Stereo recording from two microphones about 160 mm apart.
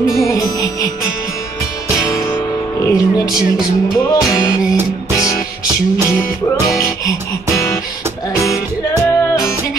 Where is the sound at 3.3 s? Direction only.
5° right (ahead or behind).